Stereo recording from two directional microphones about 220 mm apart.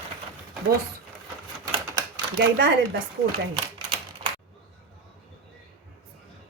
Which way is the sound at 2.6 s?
50° right (ahead or behind).